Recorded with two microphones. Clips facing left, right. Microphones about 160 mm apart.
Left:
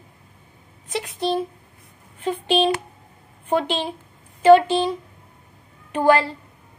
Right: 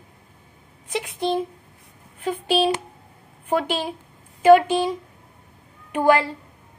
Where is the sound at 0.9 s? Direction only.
15° right (ahead or behind).